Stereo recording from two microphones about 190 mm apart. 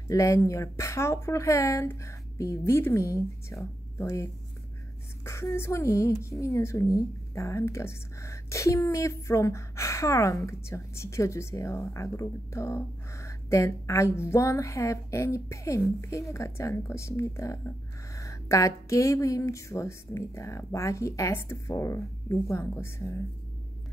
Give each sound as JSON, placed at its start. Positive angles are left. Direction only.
{"t": 0.1, "sound": "a woman's voice", "side_deg": 15}